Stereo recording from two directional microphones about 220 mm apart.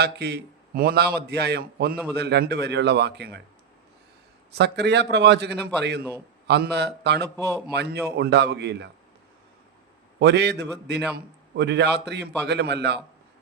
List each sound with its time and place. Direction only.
0.0 s a man's voice: 50° right (ahead or behind)
4.5 s a man's voice: 50° right (ahead or behind)
6.0 s a man's voice: 10° right (ahead or behind)
6.5 s a man's voice: 50° right (ahead or behind)
10.2 s a man's voice: 50° right (ahead or behind)